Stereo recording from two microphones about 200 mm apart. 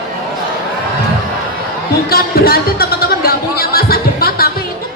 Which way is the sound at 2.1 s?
50° left (ahead or behind).